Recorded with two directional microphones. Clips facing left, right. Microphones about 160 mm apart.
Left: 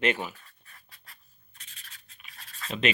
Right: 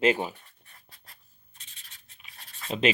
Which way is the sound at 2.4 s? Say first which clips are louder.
Right 3 dB; 25° right (ahead or behind).